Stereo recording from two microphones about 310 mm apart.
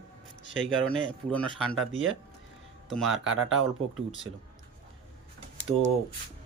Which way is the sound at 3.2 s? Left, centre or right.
Right.